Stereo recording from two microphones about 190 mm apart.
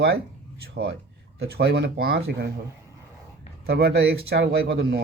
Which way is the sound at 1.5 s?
60° right (ahead or behind).